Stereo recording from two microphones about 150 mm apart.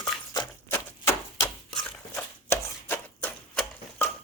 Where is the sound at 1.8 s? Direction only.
10° left (ahead or behind).